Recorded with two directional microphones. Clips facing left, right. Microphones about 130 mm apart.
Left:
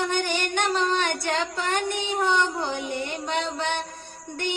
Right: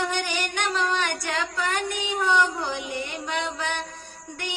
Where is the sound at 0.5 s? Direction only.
30° left (ahead or behind).